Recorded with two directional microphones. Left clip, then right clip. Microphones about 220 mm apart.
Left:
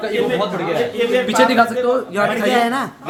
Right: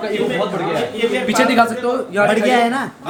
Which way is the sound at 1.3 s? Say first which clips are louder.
Even; 15° right (ahead or behind).